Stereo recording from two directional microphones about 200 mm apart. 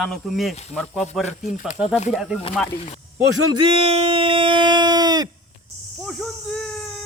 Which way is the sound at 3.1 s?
60° right (ahead or behind).